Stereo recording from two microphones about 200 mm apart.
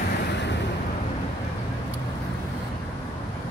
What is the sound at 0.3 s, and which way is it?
Vehicle, 60° left (ahead or behind).